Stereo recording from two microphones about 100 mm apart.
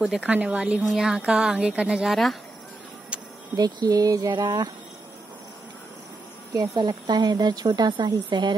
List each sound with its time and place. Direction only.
0.0 s a woman's voice: 10° right (ahead or behind)
3.5 s speech: 40° right (ahead or behind)
6.5 s a woman's voice: 40° right (ahead or behind)